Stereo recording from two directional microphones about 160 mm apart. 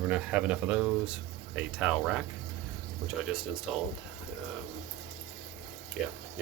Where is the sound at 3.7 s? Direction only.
5° right (ahead or behind).